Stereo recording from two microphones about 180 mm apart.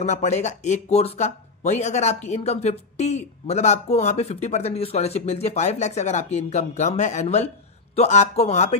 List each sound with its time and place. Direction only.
0.0 s speech: 40° left (ahead or behind)